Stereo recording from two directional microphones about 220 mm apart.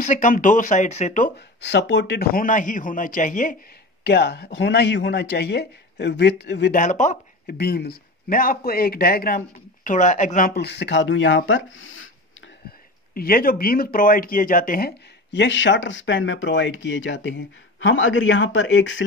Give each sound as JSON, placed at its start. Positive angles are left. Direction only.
{"t": 0.0, "sound": "a man's voice", "side_deg": 35}
{"t": 1.6, "sound": "a man's voice", "side_deg": 50}
{"t": 4.0, "sound": "speech", "side_deg": 50}
{"t": 6.8, "sound": "speech", "side_deg": 35}
{"t": 7.5, "sound": "speech", "side_deg": 45}
{"t": 13.1, "sound": "speech", "side_deg": 40}